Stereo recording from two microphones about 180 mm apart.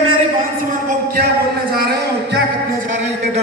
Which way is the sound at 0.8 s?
50° right (ahead or behind).